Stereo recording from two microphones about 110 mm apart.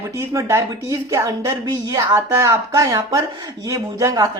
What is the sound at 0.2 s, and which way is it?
A woman's voice, 25° right (ahead or behind).